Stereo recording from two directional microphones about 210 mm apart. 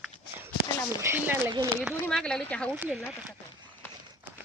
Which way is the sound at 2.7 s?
5° right (ahead or behind).